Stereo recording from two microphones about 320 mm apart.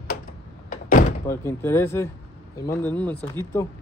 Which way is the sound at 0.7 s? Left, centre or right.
Left.